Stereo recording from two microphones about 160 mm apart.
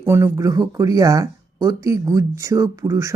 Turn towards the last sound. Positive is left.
turn(degrees=-15)  # may be behind; listen again after turning